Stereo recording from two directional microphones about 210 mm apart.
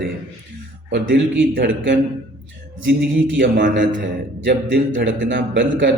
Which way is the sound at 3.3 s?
60° right (ahead or behind).